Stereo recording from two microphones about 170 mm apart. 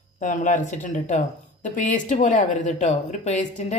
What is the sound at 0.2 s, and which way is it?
A man's voice, 50° left (ahead or behind).